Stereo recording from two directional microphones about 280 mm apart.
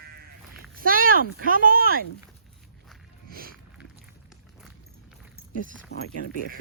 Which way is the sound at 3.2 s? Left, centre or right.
Right.